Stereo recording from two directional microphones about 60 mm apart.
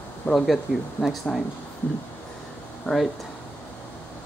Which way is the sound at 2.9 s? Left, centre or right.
Left.